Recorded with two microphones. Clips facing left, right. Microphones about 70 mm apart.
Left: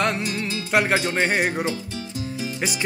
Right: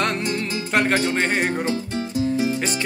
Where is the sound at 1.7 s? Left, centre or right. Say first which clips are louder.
Right 4 dB; right.